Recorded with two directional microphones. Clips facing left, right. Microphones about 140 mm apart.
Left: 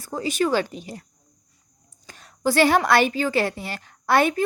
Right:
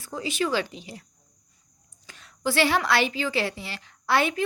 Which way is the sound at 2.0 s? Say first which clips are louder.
Left 5 dB; 45° left (ahead or behind).